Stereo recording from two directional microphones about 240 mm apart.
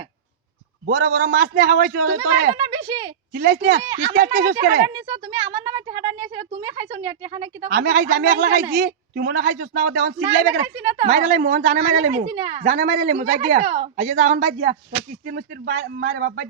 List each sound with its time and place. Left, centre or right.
0.9 s speech: right
2.6 s speech: centre
3.3 s speech: right
4.8 s speech: centre
7.7 s speech: right
10.8 s speech: centre
11.0 s speech: right